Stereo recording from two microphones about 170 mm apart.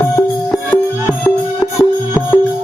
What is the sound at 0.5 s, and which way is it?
Music, 10° left (ahead or behind).